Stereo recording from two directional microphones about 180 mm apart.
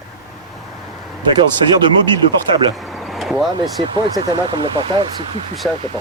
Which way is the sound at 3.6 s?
20° right (ahead or behind).